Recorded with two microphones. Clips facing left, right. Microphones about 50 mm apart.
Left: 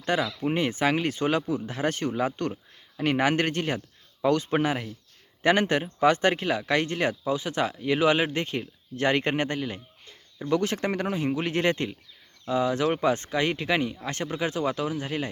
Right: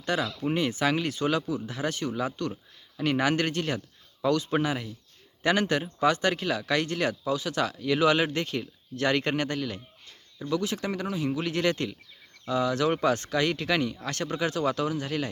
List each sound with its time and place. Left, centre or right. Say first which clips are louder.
0.0 s speech: left 2 dB; left
10.5 s speech: left 4 dB; left